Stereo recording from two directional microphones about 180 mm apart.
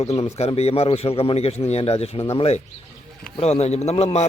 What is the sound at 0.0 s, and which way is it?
Speech, 35° left (ahead or behind).